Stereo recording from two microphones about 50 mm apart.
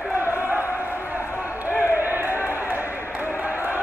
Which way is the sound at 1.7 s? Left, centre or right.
Right.